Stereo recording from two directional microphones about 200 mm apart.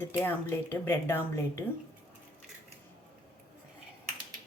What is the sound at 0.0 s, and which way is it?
Speech, 10° left (ahead or behind).